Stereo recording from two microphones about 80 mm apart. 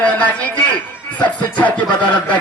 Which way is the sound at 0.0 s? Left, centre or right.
Centre.